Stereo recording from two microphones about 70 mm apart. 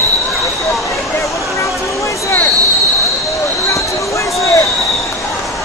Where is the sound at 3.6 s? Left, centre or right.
Left.